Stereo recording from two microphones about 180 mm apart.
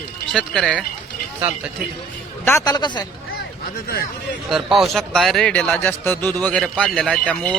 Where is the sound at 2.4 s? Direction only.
15° left (ahead or behind).